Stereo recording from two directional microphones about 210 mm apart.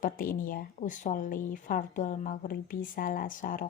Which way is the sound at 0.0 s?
40° left (ahead or behind).